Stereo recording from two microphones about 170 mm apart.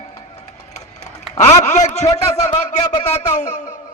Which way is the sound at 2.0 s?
20° left (ahead or behind).